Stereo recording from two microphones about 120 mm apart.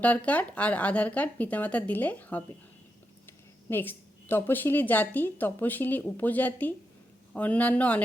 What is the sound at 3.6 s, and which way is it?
A woman's voice, 20° left (ahead or behind).